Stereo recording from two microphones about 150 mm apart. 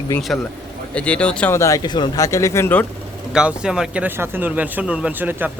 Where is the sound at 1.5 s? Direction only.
20° left (ahead or behind).